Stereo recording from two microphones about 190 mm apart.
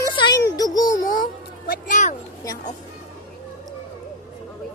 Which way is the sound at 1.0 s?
45° left (ahead or behind).